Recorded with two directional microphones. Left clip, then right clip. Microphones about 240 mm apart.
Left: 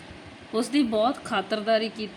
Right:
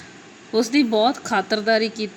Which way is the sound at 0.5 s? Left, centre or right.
Centre.